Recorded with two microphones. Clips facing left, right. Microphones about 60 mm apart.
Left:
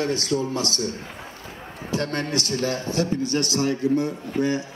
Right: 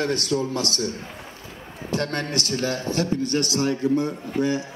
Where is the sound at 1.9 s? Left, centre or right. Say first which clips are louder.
Even; right.